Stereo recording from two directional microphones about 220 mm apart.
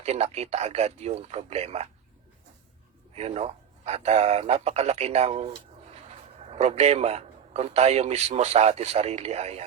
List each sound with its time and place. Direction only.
0.0 s a man's voice: 30° right (ahead or behind)
3.2 s a man's voice: 30° right (ahead or behind)
6.5 s a man's voice: 30° right (ahead or behind)